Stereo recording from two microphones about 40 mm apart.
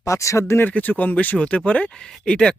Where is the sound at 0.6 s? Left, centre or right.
Left.